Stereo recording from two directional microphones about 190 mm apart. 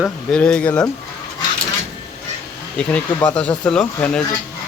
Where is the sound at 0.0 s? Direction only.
5° left (ahead or behind).